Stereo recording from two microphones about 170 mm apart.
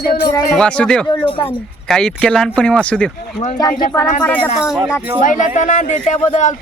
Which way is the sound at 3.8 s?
20° left (ahead or behind).